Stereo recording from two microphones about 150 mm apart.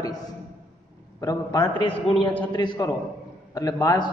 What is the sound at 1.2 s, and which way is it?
Speech, 25° left (ahead or behind).